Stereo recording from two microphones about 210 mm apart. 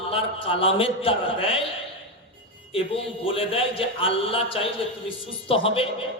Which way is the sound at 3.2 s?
25° left (ahead or behind).